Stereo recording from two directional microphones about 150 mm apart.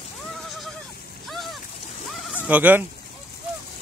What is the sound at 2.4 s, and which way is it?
Speech, 10° right (ahead or behind).